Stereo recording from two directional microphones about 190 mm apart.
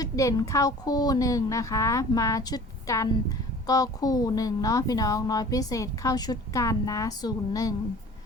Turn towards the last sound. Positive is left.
turn(degrees=20)  # may be behind; listen again after turning